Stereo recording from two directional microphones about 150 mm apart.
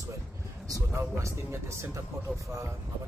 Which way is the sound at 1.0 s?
20° right (ahead or behind).